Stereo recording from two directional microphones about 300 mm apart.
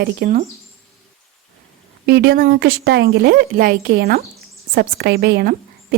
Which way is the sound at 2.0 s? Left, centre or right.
Right.